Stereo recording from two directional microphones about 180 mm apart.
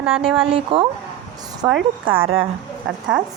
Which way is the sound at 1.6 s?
15° right (ahead or behind).